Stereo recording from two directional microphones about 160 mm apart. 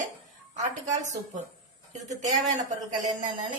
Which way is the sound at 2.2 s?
45° right (ahead or behind).